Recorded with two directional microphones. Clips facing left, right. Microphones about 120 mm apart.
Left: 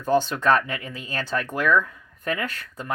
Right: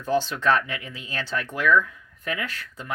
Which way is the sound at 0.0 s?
45° left (ahead or behind).